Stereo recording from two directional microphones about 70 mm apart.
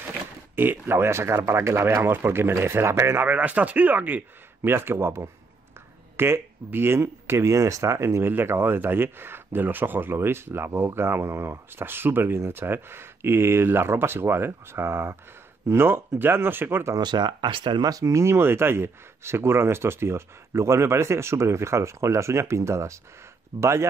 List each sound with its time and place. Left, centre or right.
0.6 s speech: right
3.3 s speech: right
4.6 s speech: right
16.9 s speech: right
18.1 s speech: right